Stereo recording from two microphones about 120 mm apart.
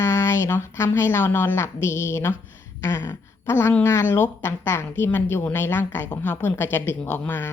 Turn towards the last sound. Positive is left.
turn(degrees=15)  # may be behind; listen again after turning